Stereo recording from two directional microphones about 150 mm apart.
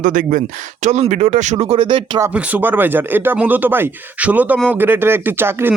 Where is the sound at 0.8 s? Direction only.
50° right (ahead or behind); by 2.2 s 35° right (ahead or behind).